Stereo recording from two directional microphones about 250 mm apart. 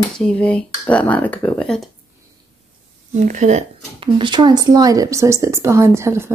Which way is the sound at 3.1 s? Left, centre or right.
Right.